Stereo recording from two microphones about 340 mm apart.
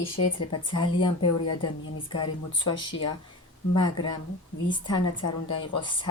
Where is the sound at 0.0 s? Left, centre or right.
Left.